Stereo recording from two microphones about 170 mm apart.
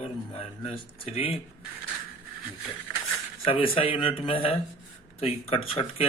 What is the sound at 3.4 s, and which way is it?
Speech, 30° left (ahead or behind).